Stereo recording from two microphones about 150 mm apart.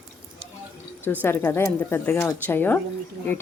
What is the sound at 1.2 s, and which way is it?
Speech, 15° left (ahead or behind).